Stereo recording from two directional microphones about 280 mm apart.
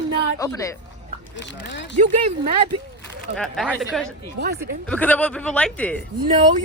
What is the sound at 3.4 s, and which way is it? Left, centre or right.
Speech, centre.